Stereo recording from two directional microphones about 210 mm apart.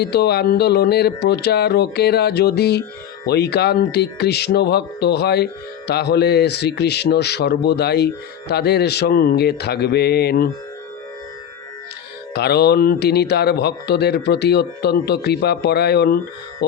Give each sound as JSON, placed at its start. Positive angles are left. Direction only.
{"t": 0.0, "sound": "a man's voice", "side_deg": 50}
{"t": 12.3, "sound": "a man's voice", "side_deg": 50}